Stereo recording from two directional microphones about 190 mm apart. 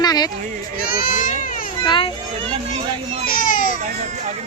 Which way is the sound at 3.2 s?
45° left (ahead or behind).